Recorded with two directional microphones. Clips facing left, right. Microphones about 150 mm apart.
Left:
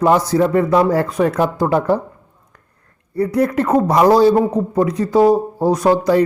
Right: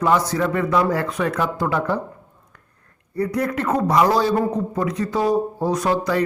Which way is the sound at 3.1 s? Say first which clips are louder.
Left 6 dB; 30° left (ahead or behind).